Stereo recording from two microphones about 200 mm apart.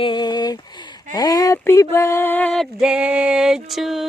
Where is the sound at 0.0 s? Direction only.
20° left (ahead or behind).